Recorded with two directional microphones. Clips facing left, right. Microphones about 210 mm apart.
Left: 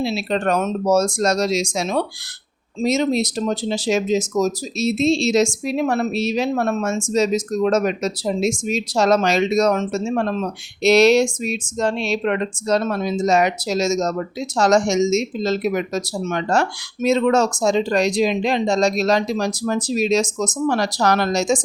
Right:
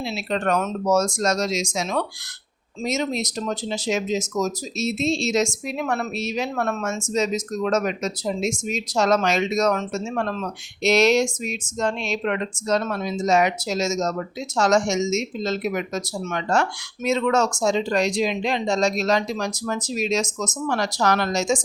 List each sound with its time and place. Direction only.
0.0 s speech: 30° left (ahead or behind)